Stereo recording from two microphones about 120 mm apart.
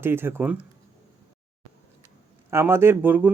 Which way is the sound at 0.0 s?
20° right (ahead or behind).